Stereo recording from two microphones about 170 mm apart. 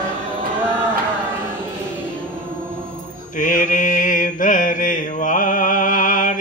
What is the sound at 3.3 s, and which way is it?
Mantra, 50° left (ahead or behind).